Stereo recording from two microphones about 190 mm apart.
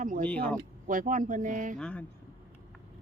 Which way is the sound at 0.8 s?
45° right (ahead or behind).